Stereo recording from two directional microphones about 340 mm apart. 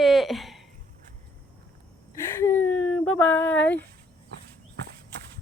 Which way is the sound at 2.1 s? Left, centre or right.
Centre.